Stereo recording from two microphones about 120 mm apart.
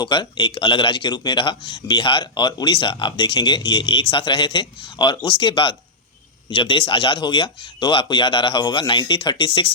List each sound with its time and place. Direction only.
0.0 s a man's voice: 40° left (ahead or behind)